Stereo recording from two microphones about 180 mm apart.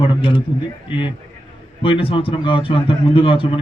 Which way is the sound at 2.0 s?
30° left (ahead or behind).